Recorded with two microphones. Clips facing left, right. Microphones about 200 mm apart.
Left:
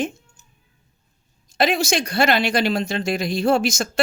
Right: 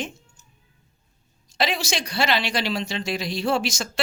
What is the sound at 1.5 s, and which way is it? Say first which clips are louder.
Speech: left 6 dB; 50° left (ahead or behind).